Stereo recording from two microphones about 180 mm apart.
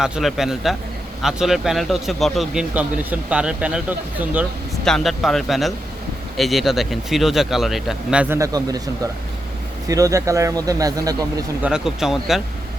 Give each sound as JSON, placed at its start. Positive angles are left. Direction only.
{"t": 0.0, "sound": "speech", "side_deg": 0}
{"t": 8.4, "sound": "speech", "side_deg": -20}
{"t": 9.9, "sound": "speech", "side_deg": -20}
{"t": 11.6, "sound": "speech", "side_deg": -5}